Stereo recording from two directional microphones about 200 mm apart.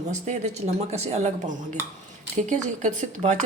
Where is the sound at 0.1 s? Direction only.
35° right (ahead or behind).